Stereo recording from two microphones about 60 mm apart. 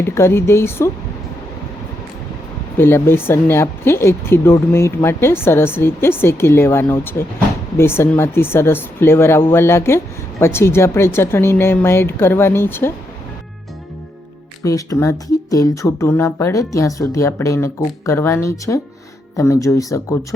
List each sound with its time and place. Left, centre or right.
0.0 s speech: left
2.7 s speech: left
14.6 s speech: left
15.9 s speech: left